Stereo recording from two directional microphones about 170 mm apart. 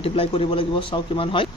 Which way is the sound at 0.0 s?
35° left (ahead or behind).